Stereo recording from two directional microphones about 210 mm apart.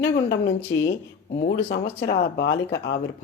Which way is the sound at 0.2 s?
55° left (ahead or behind).